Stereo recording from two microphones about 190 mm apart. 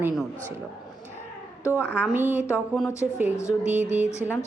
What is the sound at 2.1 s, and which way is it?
Speech, 10° right (ahead or behind).